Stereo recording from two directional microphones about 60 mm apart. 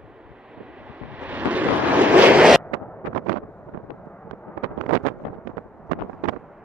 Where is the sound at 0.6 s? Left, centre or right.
Right.